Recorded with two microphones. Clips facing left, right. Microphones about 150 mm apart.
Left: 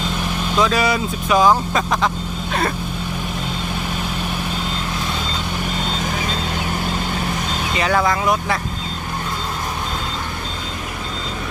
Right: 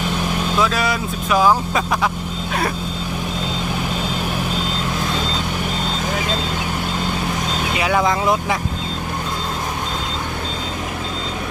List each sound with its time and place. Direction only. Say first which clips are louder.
0.6 s speech: left 4 dB; centre (ahead or behind)
7.8 s speech: left 1 dB; 10° right (ahead or behind)
8.0 s speech: right 1 dB; 20° right (ahead or behind)